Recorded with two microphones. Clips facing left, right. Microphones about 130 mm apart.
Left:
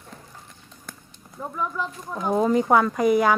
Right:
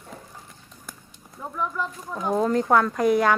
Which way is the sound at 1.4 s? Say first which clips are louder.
Even; 5° left (ahead or behind).